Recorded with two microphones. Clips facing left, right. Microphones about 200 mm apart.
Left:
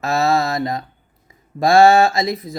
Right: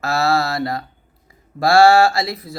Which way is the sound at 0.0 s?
20° left (ahead or behind).